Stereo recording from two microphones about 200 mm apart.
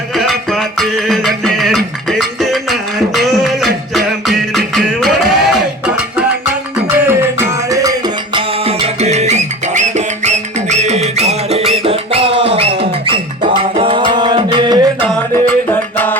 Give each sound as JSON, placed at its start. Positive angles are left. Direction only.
{"t": 0.8, "sound": "music", "side_deg": 0}
{"t": 3.2, "sound": "beatboxing", "side_deg": 0}
{"t": 3.9, "sound": "music", "side_deg": 0}
{"t": 5.3, "sound": "a sound", "side_deg": 0}
{"t": 6.9, "sound": "a sound", "side_deg": -10}
{"t": 8.4, "sound": "music", "side_deg": -30}
{"t": 15.7, "sound": "music", "side_deg": 10}